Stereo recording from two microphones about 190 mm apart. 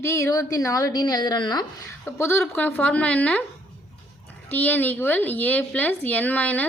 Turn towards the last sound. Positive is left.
turn(degrees=10)  # may be behind; listen again after turning